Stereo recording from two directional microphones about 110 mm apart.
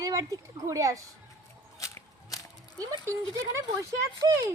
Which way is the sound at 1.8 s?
30° left (ahead or behind).